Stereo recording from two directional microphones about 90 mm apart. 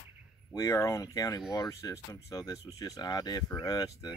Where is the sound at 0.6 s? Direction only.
35° left (ahead or behind).